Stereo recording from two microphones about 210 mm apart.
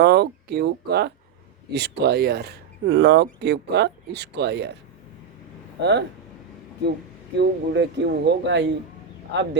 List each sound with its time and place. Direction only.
0.0 s speech: 50° right (ahead or behind)
7.3 s speech: 55° right (ahead or behind)